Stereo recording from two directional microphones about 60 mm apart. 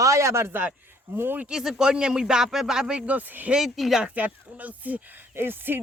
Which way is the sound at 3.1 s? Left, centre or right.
Right.